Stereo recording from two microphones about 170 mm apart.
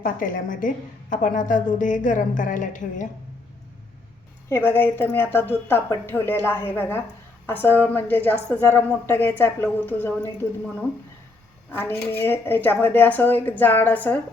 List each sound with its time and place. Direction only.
0.0 s a woman's voice: 55° left (ahead or behind)
4.4 s a woman's voice: 15° left (ahead or behind)
11.7 s a woman's voice: 15° left (ahead or behind)